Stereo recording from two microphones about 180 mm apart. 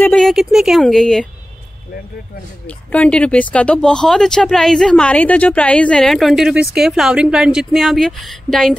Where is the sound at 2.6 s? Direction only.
5° left (ahead or behind).